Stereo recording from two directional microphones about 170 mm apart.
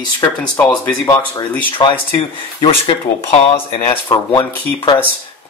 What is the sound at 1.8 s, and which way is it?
Speech, 25° left (ahead or behind).